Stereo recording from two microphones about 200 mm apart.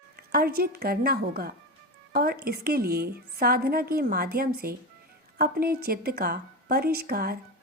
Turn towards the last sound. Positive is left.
turn(degrees=-50)  # may be behind; listen again after turning